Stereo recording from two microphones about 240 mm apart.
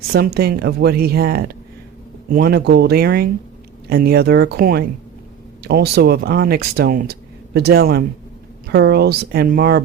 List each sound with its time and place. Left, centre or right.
0.3 s speech: right